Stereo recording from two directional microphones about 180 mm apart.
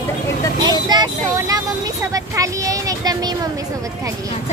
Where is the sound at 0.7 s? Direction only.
25° right (ahead or behind).